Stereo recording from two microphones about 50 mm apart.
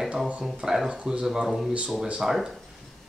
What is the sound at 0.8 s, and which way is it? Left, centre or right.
Speech, centre.